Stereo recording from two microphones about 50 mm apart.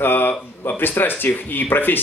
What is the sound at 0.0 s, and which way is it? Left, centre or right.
Speech, left.